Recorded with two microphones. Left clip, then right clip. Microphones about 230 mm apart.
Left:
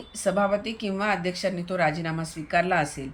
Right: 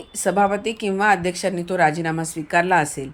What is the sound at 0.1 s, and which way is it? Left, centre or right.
Speech, centre.